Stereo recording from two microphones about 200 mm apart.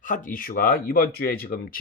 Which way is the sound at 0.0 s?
40° left (ahead or behind).